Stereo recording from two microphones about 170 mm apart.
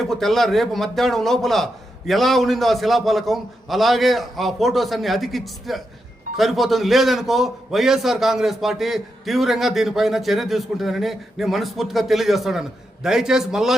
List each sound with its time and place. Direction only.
0.0 s a man's voice: centre (ahead or behind)